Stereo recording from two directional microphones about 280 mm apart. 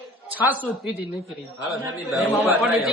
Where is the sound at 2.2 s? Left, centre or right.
Centre.